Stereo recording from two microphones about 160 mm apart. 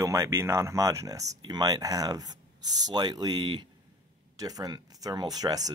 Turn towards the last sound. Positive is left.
turn(degrees=-25)  # may be behind; listen again after turning